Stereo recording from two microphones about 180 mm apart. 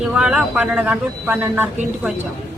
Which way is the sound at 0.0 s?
5° right (ahead or behind).